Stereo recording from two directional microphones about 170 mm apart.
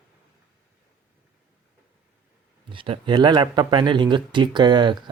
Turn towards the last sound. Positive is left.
turn(degrees=-25)  # may be behind; listen again after turning